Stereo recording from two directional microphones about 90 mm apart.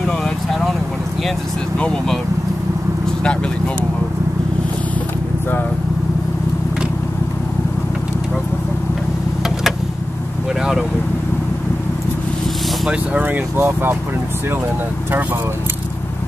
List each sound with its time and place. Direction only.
0.0 s vehicle: 5° left (ahead or behind)
1.8 s speech: 10° left (ahead or behind)
12.8 s speech: 15° right (ahead or behind)
13.6 s speech: 25° right (ahead or behind)